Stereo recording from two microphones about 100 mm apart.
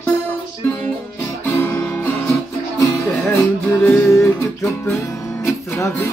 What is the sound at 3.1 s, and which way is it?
Music, 15° left (ahead or behind).